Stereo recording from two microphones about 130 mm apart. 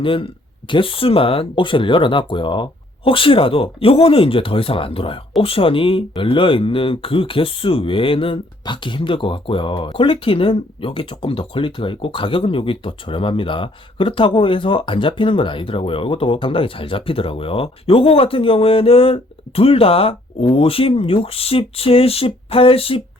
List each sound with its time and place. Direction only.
0.0 s speech: 40° left (ahead or behind)